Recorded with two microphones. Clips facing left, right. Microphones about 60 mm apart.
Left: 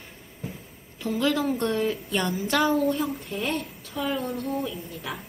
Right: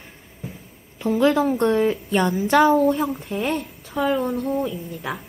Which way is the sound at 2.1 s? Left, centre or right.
Right.